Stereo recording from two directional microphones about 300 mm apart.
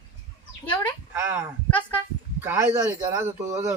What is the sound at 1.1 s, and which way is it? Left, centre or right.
Speech, centre.